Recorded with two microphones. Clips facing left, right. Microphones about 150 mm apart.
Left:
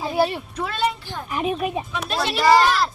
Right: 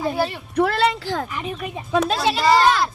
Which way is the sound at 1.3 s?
20° left (ahead or behind).